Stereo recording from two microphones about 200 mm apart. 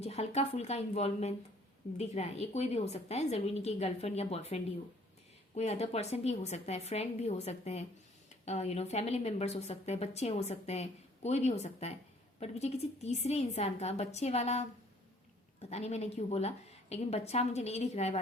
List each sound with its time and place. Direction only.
0.0 s a woman's voice: 30° left (ahead or behind)
15.7 s a woman's voice: 35° left (ahead or behind)